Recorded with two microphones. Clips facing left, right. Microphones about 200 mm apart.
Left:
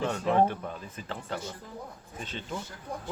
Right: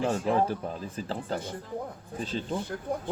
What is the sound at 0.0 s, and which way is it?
Speech, 35° right (ahead or behind).